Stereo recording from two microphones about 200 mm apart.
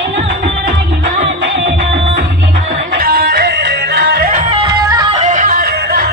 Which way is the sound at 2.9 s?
45° right (ahead or behind).